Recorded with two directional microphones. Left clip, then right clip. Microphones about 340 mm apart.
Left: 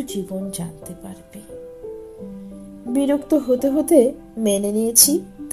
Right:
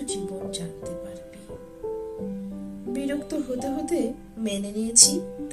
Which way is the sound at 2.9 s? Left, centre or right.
Centre.